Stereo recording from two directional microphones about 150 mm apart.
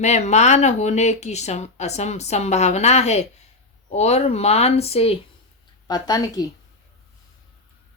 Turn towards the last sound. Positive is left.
turn(degrees=25)  # may be behind; listen again after turning